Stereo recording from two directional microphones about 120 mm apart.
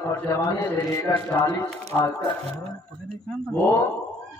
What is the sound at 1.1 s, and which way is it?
Mantra, 20° left (ahead or behind).